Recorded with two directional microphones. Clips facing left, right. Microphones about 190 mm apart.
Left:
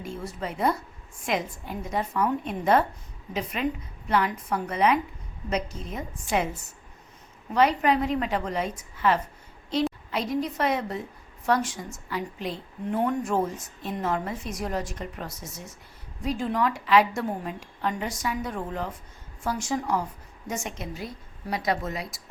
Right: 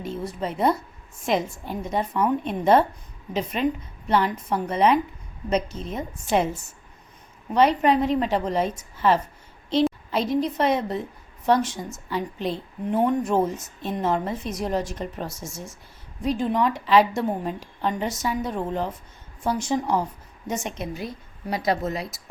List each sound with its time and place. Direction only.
0.0 s a woman's voice: 20° right (ahead or behind)